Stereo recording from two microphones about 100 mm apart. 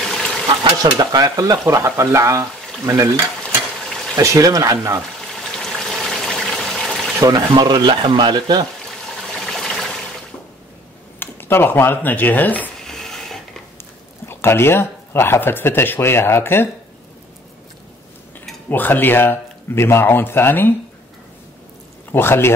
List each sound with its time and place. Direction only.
0.0 s a sound: 5° left (ahead or behind)
0.8 s speech: 40° right (ahead or behind)
4.2 s speech: 35° right (ahead or behind)
5.2 s water: 5° left (ahead or behind)
7.2 s speech: 35° right (ahead or behind)
7.5 s speech: 50° right (ahead or behind)
9.1 s water: 5° left (ahead or behind)
11.1 s speech: 20° left (ahead or behind)
12.8 s a sound: 5° left (ahead or behind)
14.2 s speech: 25° left (ahead or behind)
18.7 s speech: 20° left (ahead or behind)
22.1 s speech: 25° left (ahead or behind)